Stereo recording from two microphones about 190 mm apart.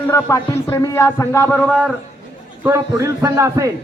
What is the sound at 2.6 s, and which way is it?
A man's voice, 15° right (ahead or behind).